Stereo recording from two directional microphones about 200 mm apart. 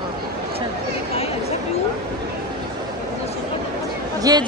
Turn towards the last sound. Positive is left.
turn(degrees=-20)  # may be behind; listen again after turning